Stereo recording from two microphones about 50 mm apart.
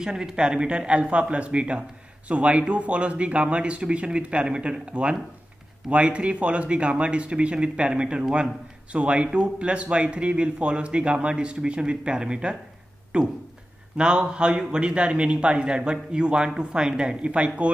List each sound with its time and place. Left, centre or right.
0.0 s a man's voice: centre